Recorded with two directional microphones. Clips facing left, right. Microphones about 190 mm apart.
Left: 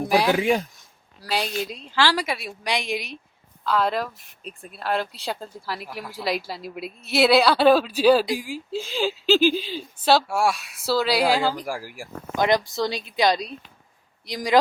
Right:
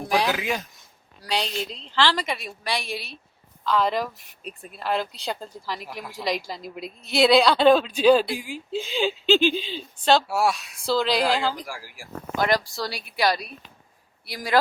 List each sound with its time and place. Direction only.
0.0 s a woman's voice: 10° left (ahead or behind)
0.3 s speech: 30° left (ahead or behind)
1.2 s a woman's voice: 5° left (ahead or behind)
2.6 s a woman's voice: 15° left (ahead or behind)
3.7 s a woman's voice: centre (ahead or behind)
11.6 s speech: 50° left (ahead or behind)
12.4 s a woman's voice: 20° left (ahead or behind)